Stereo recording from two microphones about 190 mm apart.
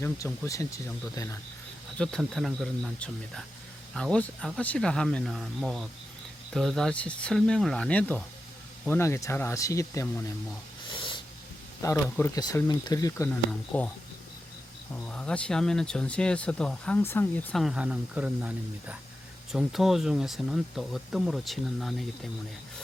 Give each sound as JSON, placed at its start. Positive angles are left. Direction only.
{"t": 0.4, "sound": "speech", "side_deg": 15}
{"t": 2.0, "sound": "speech", "side_deg": 5}
{"t": 10.8, "sound": "a sound", "side_deg": 25}
{"t": 11.8, "sound": "speech", "side_deg": 15}
{"t": 14.9, "sound": "speech", "side_deg": 5}